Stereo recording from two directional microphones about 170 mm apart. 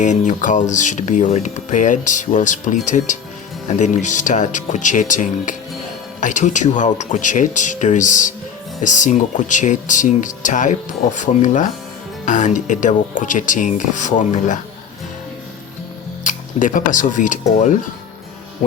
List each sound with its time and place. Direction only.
0.0 s speech: 45° left (ahead or behind)
16.2 s speech: 50° left (ahead or behind)